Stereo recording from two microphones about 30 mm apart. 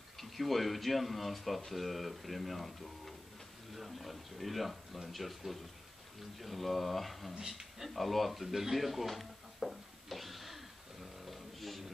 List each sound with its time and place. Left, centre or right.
0.2 s speech: centre
7.3 s speech: centre
7.8 s speech: centre
8.7 s a sound: centre